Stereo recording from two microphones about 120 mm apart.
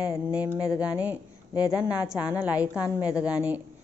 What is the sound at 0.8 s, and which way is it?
Speech, 15° right (ahead or behind).